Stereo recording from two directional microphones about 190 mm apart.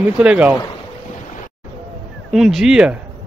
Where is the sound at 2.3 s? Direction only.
Centre (ahead or behind).